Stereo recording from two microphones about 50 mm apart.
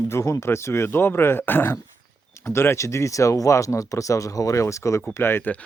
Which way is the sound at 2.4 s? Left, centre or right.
Left.